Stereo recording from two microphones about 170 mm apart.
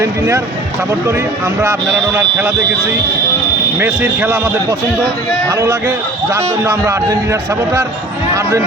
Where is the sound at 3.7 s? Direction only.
10° right (ahead or behind).